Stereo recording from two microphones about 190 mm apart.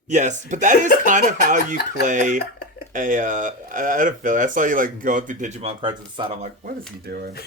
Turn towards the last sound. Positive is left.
turn(degrees=-55)  # may be behind; listen again after turning